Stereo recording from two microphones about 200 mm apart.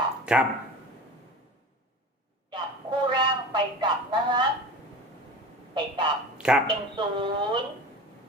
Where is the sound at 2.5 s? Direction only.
20° right (ahead or behind).